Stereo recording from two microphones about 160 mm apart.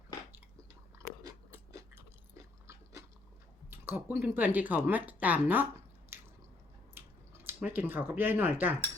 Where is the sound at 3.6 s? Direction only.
15° right (ahead or behind).